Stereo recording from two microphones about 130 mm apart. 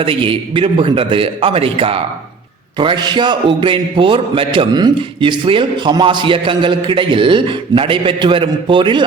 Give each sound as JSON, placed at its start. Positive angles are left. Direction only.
{"t": 0.0, "sound": "a man's voice", "side_deg": -40}